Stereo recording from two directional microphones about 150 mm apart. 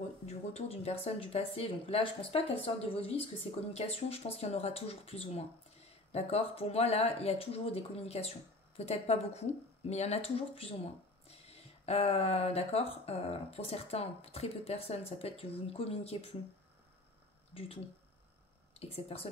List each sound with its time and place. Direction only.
0.3 s speech: 45° left (ahead or behind)
18.8 s speech: 40° left (ahead or behind)